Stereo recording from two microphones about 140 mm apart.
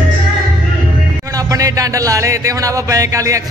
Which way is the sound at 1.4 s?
25° right (ahead or behind).